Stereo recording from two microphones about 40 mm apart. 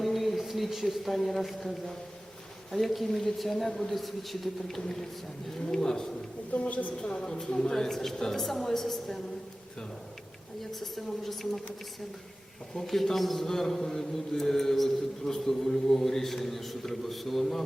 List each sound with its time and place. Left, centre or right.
0.0 s a woman's voice: centre
5.6 s mantra: centre
6.5 s a woman's voice: left
7.0 s mantra: left
8.3 s a woman's voice: centre
10.6 s a woman's voice: centre
12.7 s a woman's voice: centre
13.1 s mantra: centre